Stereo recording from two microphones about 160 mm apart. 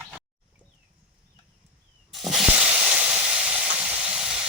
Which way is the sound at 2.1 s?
Centre (ahead or behind).